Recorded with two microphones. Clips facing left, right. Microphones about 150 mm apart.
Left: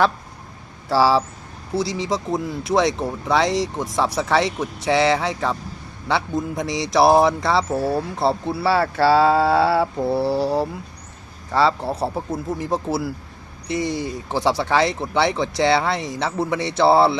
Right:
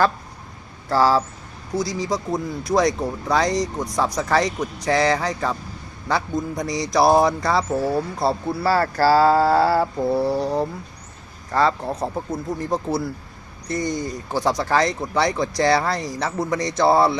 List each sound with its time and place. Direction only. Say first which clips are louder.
0.9 s speech: left 1 dB; 5° left (ahead or behind)
1.7 s speech: left 1 dB; 25° left (ahead or behind)
2.3 s speech: left 1 dB; centre (ahead or behind)
16.8 s speech: left 2 dB; 30° left (ahead or behind)